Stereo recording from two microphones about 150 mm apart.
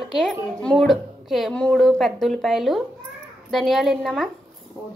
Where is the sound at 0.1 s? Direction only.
5° left (ahead or behind).